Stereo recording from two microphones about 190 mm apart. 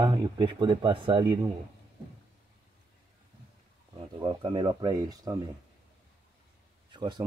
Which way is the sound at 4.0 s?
25° right (ahead or behind).